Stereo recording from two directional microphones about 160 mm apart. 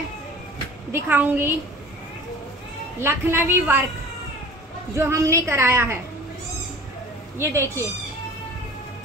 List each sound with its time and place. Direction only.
0.9 s a woman's voice: 10° right (ahead or behind)
3.0 s a woman's voice: 15° right (ahead or behind)
4.9 s a woman's voice: 15° right (ahead or behind)
7.3 s a woman's voice: 15° right (ahead or behind)